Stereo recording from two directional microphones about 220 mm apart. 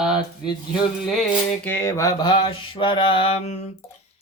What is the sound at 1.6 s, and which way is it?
Mantra, 10° left (ahead or behind).